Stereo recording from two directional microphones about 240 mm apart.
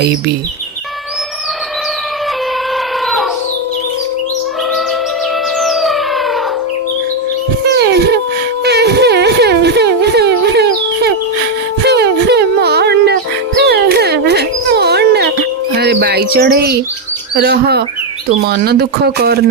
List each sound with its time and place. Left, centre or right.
5.5 s music: centre
7.7 s a sound: right
15.8 s bird: right
17.3 s speech: right